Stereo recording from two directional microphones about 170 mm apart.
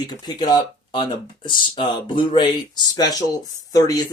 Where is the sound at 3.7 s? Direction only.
20° left (ahead or behind).